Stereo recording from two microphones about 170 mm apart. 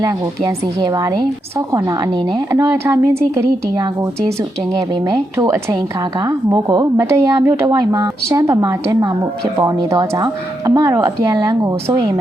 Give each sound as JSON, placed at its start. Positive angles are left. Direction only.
{"t": 0.0, "sound": "a woman's voice", "side_deg": -20}
{"t": 4.7, "sound": "a woman's voice", "side_deg": -20}